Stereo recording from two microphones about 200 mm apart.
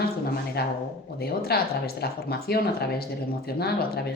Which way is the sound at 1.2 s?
50° left (ahead or behind).